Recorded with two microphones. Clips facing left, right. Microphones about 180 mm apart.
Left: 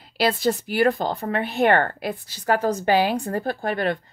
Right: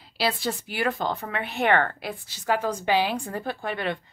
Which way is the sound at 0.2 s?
40° left (ahead or behind).